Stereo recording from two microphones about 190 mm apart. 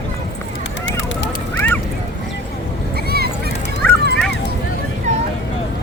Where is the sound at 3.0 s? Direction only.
55° right (ahead or behind).